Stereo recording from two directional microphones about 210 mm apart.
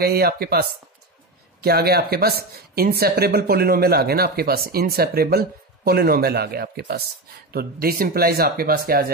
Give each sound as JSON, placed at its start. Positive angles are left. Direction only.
{"t": 0.0, "sound": "a woman's voice", "side_deg": -45}